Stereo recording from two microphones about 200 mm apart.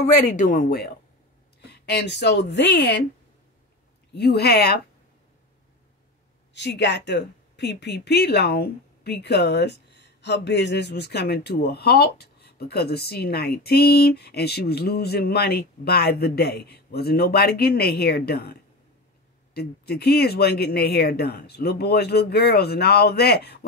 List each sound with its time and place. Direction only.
0.0 s speech: 35° left (ahead or behind); by 3.0 s 60° left (ahead or behind)
4.1 s speech: 55° left (ahead or behind)
6.5 s speech: 60° left (ahead or behind)